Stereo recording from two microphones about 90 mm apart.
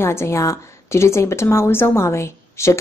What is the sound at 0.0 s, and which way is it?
Speech, 30° left (ahead or behind).